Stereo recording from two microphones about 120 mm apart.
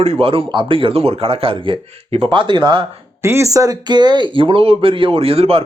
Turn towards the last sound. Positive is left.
turn(degrees=-55)  # may be behind; listen again after turning